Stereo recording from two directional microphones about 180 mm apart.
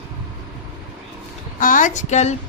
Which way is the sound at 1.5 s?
45° left (ahead or behind).